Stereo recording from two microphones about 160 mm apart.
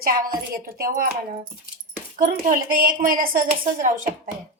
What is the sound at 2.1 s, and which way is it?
Speech, 60° right (ahead or behind).